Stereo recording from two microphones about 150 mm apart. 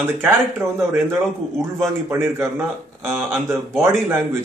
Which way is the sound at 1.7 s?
15° right (ahead or behind).